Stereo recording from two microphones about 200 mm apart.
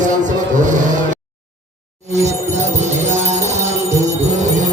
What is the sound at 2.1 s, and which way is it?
Music, 35° right (ahead or behind).